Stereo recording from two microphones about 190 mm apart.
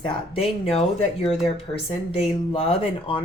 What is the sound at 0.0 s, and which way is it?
Speech, 30° left (ahead or behind).